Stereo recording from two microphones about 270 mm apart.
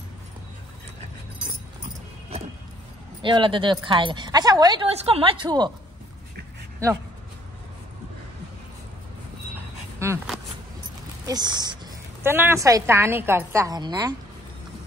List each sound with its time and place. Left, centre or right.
2.3 s vehicle: right
3.2 s a woman's voice: centre
9.9 s a woman's voice: centre